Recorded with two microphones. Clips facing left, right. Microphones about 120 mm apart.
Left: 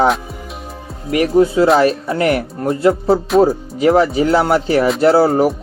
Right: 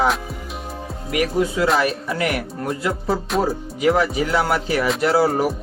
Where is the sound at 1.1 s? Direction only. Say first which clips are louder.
Left 8 dB; 30° left (ahead or behind).